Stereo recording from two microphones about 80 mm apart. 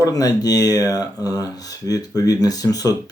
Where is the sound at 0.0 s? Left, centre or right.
Left.